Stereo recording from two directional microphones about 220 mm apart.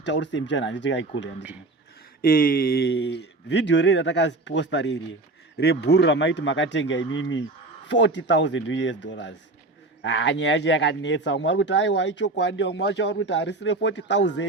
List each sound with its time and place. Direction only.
0.0 s speech: 55° left (ahead or behind)
2.2 s speech: 40° left (ahead or behind)